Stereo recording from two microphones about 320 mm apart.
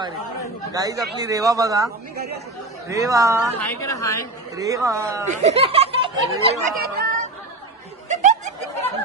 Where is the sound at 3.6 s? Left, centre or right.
Centre.